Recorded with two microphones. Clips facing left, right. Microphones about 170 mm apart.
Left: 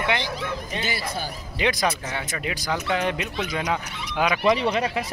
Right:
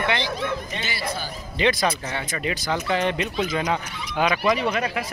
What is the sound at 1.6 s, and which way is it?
Speech, 15° left (ahead or behind).